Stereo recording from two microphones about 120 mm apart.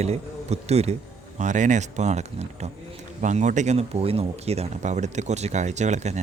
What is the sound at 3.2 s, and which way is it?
Speech, 90° right.